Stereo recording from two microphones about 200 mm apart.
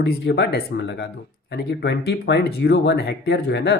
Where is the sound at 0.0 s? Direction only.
55° left (ahead or behind).